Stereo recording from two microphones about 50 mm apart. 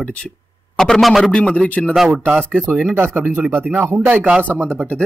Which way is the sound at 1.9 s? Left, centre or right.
Centre.